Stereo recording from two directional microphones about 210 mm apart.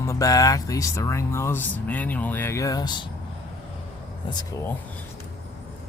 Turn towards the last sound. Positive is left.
turn(degrees=15)  # may be behind; listen again after turning